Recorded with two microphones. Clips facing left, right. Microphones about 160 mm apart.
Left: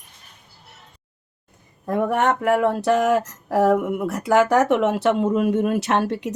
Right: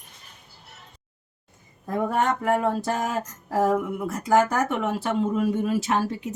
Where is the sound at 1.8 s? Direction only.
65° left (ahead or behind).